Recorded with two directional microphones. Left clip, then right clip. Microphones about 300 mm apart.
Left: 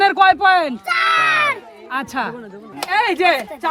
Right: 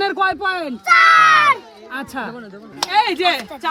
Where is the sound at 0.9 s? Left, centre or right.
Right.